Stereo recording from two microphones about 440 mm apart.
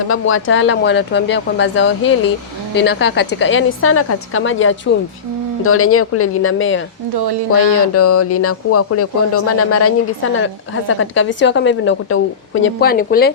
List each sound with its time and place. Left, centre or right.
0.1 s a woman's voice: left